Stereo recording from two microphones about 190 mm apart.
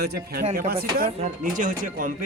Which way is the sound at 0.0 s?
55° right (ahead or behind).